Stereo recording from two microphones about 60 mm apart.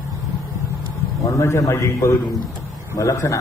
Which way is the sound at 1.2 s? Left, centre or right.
Left.